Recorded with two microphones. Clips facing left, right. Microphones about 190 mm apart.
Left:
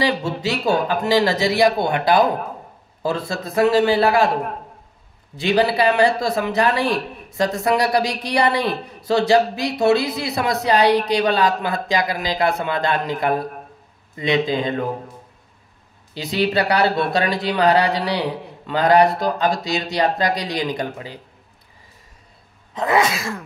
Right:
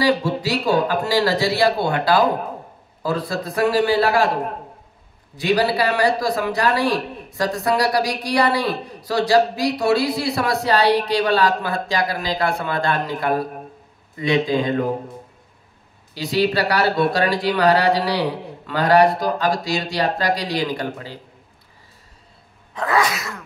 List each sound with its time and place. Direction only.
0.0 s a man's voice: 25° left (ahead or behind)
5.4 s a man's voice: 25° left (ahead or behind)
16.2 s a man's voice: 20° left (ahead or behind)
22.8 s a man's voice: 25° left (ahead or behind)